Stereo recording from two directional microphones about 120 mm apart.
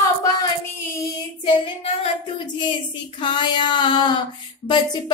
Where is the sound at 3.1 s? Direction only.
40° left (ahead or behind).